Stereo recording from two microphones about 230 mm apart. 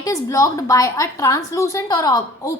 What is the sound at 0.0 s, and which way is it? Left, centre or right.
A woman's voice, centre.